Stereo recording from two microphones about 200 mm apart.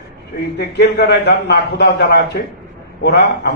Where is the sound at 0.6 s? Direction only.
55° left (ahead or behind).